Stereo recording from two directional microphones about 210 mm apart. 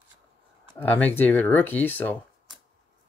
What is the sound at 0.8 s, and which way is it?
Speech, 10° left (ahead or behind).